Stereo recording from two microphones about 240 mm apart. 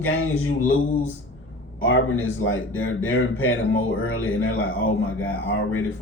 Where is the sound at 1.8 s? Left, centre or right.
Left.